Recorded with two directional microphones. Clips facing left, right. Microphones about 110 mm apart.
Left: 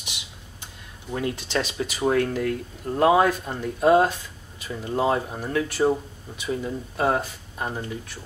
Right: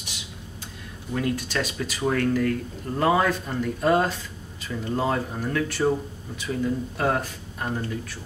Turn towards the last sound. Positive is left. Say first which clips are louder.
# right 1 dB
turn(degrees=15)  # may be behind; listen again after turning